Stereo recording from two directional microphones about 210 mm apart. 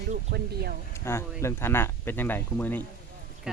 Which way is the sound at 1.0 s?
10° left (ahead or behind).